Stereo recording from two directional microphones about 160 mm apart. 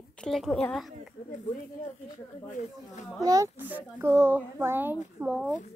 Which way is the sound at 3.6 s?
10° right (ahead or behind).